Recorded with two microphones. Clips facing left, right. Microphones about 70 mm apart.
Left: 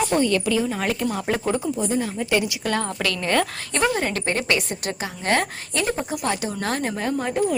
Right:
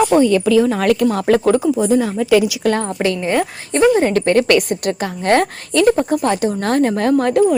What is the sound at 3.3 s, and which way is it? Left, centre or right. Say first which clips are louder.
Speech: right 4 dB; centre.